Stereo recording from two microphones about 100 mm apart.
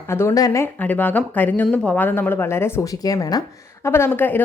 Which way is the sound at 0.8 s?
15° left (ahead or behind).